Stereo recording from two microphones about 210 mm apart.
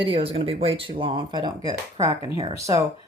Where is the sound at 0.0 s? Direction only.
25° right (ahead or behind).